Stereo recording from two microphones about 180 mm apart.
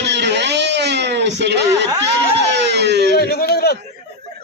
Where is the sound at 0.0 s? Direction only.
70° right (ahead or behind).